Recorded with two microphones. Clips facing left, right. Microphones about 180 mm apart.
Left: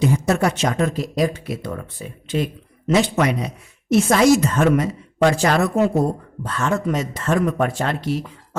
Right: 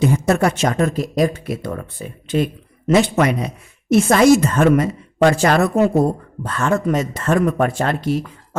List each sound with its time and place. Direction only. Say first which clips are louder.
0.0 s speech: right 2 dB; 55° right (ahead or behind)